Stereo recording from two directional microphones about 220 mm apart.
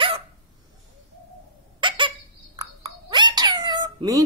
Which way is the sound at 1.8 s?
20° right (ahead or behind).